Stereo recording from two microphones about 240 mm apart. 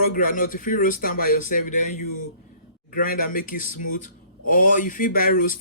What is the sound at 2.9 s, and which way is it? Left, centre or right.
Speech, left.